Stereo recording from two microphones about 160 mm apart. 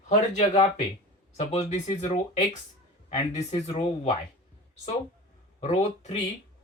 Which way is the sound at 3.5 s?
30° left (ahead or behind).